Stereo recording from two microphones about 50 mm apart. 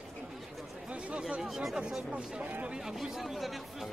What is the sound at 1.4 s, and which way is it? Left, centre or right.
Speech, centre.